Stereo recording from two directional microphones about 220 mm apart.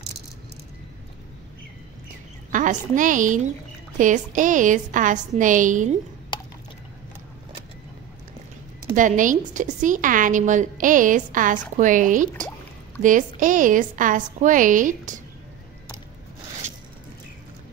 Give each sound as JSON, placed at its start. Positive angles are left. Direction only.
{"t": 2.5, "sound": "a woman's voice", "side_deg": -35}
{"t": 8.9, "sound": "a woman's voice", "side_deg": -35}